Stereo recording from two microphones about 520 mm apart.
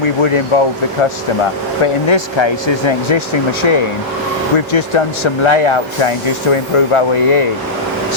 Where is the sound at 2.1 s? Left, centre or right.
Left.